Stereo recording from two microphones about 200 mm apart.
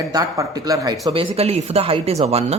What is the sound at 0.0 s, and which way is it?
Speech, 15° right (ahead or behind).